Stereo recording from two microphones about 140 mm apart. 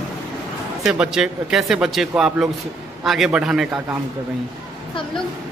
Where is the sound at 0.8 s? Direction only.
5° right (ahead or behind).